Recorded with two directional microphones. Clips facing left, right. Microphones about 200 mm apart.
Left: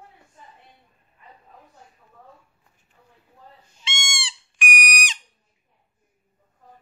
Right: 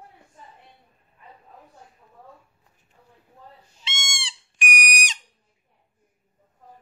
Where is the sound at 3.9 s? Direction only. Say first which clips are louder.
Left 3 dB; 40° right (ahead or behind).